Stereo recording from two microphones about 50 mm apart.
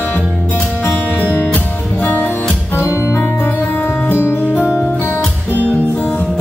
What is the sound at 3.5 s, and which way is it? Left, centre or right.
Music, left.